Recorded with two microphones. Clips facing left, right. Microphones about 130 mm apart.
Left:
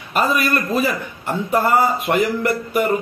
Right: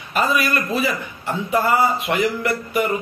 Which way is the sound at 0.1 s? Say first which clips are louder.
Left 1 dB; 45° left (ahead or behind).